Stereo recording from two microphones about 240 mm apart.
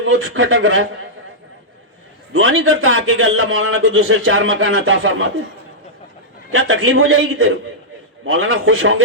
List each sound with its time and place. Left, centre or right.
0.0 s a man's voice: right
2.3 s a man's voice: right
6.5 s a man's voice: right